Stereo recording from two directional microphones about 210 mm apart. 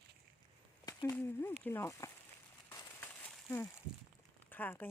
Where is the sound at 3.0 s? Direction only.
10° left (ahead or behind).